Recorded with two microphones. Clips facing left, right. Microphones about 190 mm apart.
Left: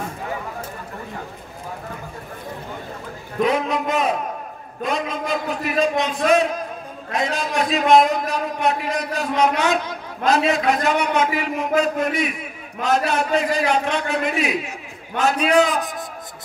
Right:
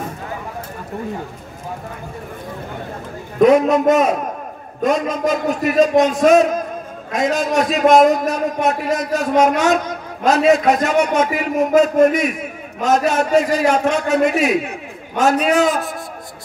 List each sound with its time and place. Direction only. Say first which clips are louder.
3.3 s a man's voice: right 9 dB; 45° right (ahead or behind)